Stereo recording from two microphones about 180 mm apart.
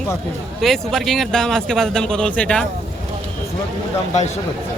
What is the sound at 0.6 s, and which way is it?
A man's voice, centre (ahead or behind).